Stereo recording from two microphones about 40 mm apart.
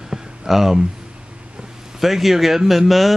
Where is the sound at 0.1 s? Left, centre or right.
Centre.